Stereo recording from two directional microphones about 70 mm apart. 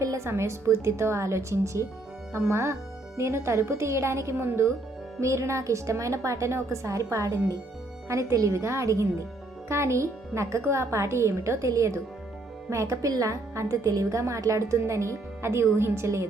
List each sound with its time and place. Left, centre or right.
0.3 s a woman's voice: right
5.2 s a woman's voice: right